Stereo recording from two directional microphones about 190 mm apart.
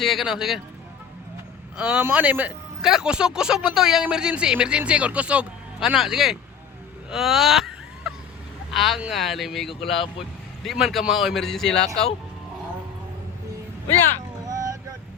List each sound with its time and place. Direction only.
0.0 s a man's voice: centre (ahead or behind)
1.7 s a man's voice: 5° right (ahead or behind)
14.4 s vehicle: 20° right (ahead or behind)